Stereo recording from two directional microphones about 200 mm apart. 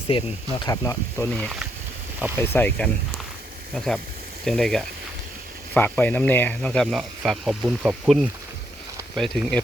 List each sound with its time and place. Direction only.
0.1 s speech: 25° left (ahead or behind); by 9.6 s centre (ahead or behind)